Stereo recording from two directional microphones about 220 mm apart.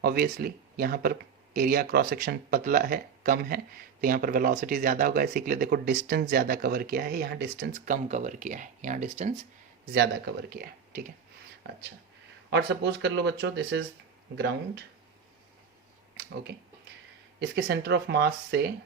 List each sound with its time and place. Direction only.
0.0 s speech: 45° right (ahead or behind)
9.9 s speech: 50° right (ahead or behind)
12.5 s speech: 50° right (ahead or behind)
16.1 s speech: 45° right (ahead or behind)